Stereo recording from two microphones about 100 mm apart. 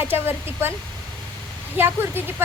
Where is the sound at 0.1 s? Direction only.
25° right (ahead or behind).